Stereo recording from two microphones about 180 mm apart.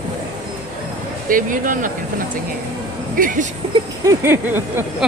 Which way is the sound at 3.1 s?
50° right (ahead or behind).